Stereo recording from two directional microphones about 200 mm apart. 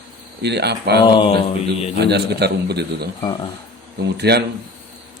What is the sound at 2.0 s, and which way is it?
Speech, 55° right (ahead or behind).